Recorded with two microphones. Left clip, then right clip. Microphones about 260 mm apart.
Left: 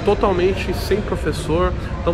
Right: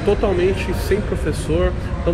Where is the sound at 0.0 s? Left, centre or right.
Centre.